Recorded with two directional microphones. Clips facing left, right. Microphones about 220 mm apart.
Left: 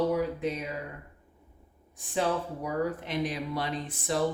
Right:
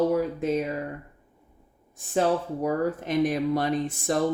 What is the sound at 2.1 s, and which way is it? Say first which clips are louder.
Speech: right 5 dB; 45° right (ahead or behind).